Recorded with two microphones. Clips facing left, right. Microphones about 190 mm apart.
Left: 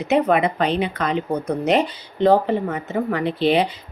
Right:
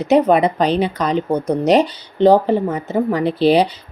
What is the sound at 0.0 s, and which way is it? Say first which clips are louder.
Speech: right 5 dB; 35° right (ahead or behind).